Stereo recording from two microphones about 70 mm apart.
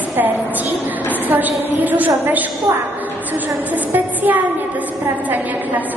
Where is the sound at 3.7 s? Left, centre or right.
Right.